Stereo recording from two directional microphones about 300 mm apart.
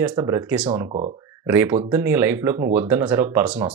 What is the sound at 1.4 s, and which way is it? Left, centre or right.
Speech, centre.